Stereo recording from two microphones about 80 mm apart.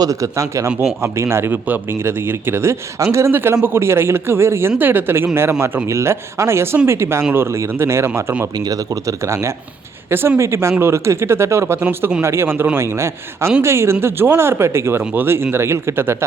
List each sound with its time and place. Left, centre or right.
0.0 s a man's voice: right
8.5 s a man's voice: right